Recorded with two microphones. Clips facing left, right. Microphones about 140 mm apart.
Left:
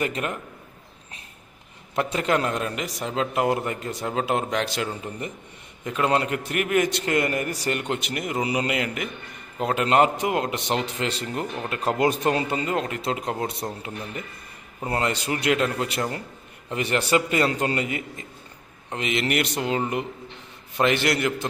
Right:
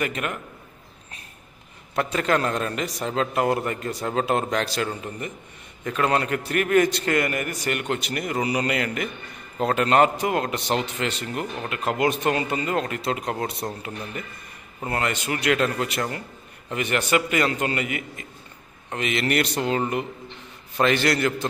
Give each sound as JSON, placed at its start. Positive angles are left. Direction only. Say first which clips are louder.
{"t": 0.0, "sound": "a man's voice", "louder": "even", "side_deg": 25}
{"t": 2.0, "sound": "a man's voice", "louder": "even", "side_deg": 20}
{"t": 5.9, "sound": "a man's voice", "louder": "even", "side_deg": 20}
{"t": 7.9, "sound": "a man's voice", "louder": "right 1 dB", "side_deg": 20}
{"t": 14.9, "sound": "a man's voice", "louder": "left 1 dB", "side_deg": 25}